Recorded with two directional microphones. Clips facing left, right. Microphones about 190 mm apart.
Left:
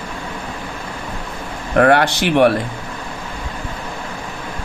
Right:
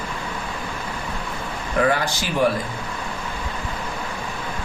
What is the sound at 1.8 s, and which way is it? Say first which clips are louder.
Speech: left 8 dB; 70° left (ahead or behind).